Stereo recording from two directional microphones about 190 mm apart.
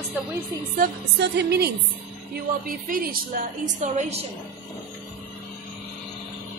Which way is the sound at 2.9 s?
40° right (ahead or behind).